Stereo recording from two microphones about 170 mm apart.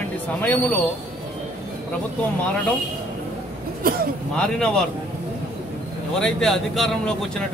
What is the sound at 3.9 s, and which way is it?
Speech, 60° right (ahead or behind).